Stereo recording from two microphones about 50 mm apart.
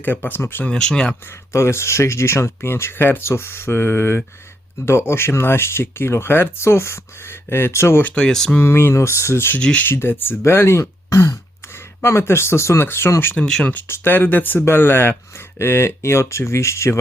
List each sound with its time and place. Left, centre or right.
0.0 s speech: left
0.6 s speech: centre
1.5 s speech: left
2.6 s speech: left
6.6 s speech: left
8.1 s speech: centre
8.6 s speech: left
9.8 s speech: left
12.0 s speech: left
13.3 s speech: centre
13.8 s speech: left
15.5 s speech: left